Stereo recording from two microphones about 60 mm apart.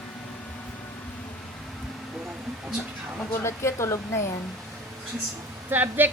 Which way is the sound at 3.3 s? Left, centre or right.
Left.